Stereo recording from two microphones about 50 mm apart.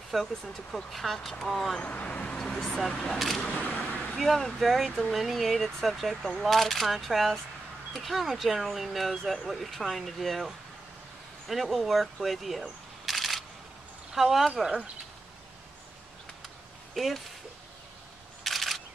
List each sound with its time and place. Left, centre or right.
0.1 s speech: centre
1.8 s speech: left
2.3 s a sound: centre
2.9 s speech: centre
3.5 s speech: left
4.2 s speech: centre
14.5 s speech: centre
16.9 s speech: centre
18.4 s single-lens reflex camera: centre